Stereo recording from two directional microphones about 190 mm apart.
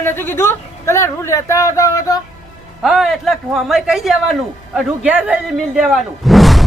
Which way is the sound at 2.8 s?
Centre (ahead or behind).